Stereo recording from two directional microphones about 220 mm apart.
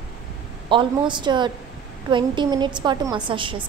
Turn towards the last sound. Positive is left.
turn(degrees=-20)  # may be behind; listen again after turning